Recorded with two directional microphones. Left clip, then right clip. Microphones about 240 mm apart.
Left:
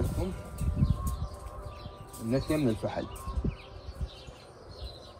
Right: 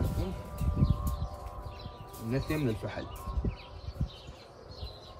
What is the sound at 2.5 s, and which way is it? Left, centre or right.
Speech, centre.